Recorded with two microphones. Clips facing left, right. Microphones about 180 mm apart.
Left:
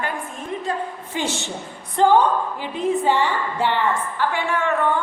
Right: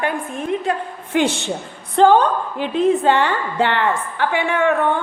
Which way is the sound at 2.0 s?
70° right (ahead or behind).